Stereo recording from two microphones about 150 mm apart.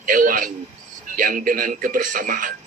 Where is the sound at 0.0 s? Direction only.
65° right (ahead or behind).